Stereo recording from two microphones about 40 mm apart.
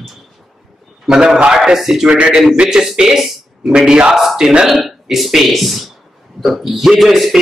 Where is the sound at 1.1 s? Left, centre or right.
Centre.